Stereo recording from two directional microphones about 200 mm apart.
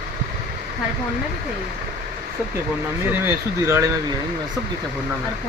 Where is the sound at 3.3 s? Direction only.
15° right (ahead or behind).